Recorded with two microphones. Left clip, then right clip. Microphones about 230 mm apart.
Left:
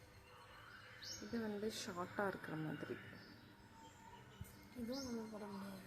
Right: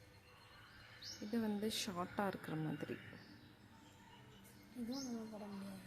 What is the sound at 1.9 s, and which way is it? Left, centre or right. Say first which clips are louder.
Speech: right 1 dB; right.